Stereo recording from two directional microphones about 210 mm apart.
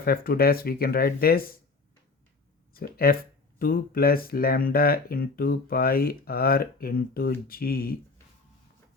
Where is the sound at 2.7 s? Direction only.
45° left (ahead or behind).